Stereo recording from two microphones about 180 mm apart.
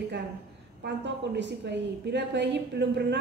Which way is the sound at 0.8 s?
75° right (ahead or behind).